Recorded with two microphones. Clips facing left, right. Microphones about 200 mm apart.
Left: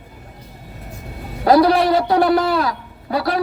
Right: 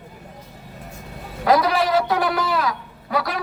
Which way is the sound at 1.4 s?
35° left (ahead or behind).